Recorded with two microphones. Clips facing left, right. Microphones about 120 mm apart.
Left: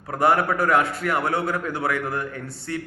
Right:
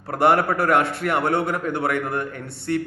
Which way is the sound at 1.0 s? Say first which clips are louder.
Right 2 dB; 25° right (ahead or behind).